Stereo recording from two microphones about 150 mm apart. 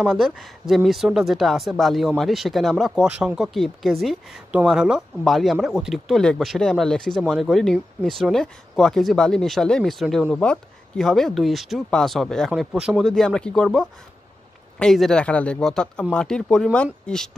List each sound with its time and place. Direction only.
0.0 s speech: centre (ahead or behind)